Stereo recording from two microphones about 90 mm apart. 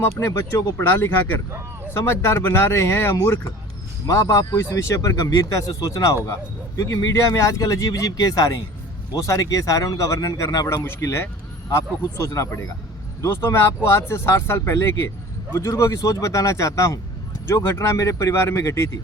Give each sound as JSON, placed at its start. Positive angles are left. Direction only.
{"t": 0.0, "sound": "speech", "side_deg": 30}
{"t": 4.0, "sound": "speech", "side_deg": 40}
{"t": 12.3, "sound": "speech", "side_deg": 35}